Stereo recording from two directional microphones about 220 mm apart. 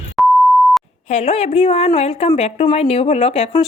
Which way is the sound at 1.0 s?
30° left (ahead or behind).